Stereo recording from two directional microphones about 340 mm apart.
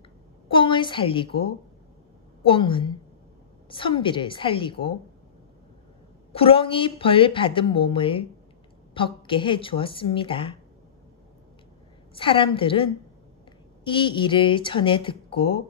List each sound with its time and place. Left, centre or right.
0.5 s a woman's voice: centre
6.3 s a woman's voice: centre
12.2 s a woman's voice: centre